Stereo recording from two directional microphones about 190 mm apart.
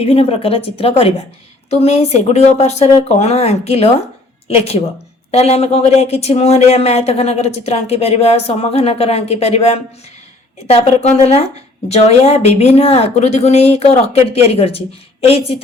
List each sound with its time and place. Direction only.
0.0 s speech: 30° left (ahead or behind)
5.3 s speech: 35° left (ahead or behind)